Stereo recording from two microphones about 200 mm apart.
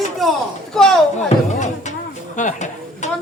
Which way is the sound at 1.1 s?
35° left (ahead or behind).